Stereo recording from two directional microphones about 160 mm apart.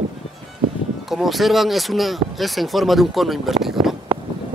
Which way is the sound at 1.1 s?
Centre (ahead or behind).